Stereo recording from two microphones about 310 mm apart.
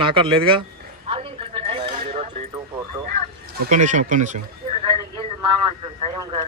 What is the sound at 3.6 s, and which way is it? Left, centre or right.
Speech, right.